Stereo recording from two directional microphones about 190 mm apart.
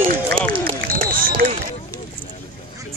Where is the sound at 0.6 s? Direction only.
50° right (ahead or behind).